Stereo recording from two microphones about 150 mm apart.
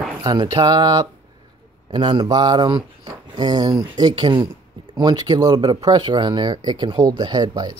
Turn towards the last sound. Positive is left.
turn(degrees=-25)  # may be behind; listen again after turning